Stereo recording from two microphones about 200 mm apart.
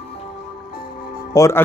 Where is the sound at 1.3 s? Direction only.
15° left (ahead or behind).